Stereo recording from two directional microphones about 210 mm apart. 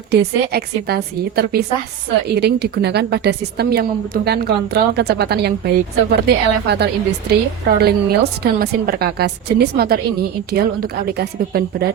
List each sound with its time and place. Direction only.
0.1 s a woman's voice: 50° right (ahead or behind)